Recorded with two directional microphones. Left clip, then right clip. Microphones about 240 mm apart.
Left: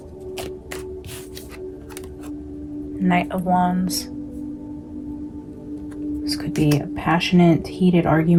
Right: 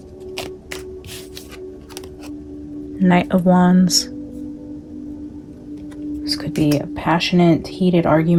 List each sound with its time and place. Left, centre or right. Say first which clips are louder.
3.0 s speech: right 5 dB; right
6.2 s whispering: right 4 dB; right
6.7 s speech: right 2 dB; right